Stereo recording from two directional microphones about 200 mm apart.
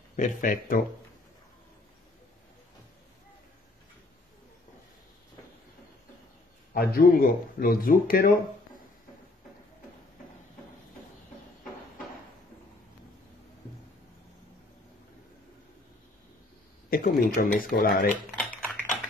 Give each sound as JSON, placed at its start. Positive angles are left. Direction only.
{"t": 0.1, "sound": "speech", "side_deg": 40}
{"t": 6.7, "sound": "speech", "side_deg": 50}
{"t": 16.9, "sound": "speech", "side_deg": 45}
{"t": 18.4, "sound": "a sound", "side_deg": 10}